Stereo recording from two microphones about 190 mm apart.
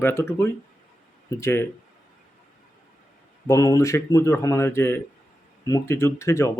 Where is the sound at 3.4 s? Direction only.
20° left (ahead or behind).